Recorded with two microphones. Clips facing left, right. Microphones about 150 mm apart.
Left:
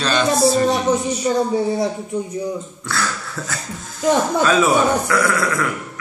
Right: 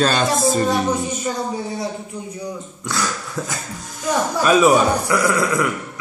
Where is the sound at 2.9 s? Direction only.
15° right (ahead or behind).